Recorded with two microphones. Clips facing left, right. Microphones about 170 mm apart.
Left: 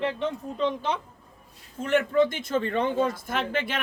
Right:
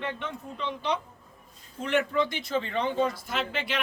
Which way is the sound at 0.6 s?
45° left (ahead or behind).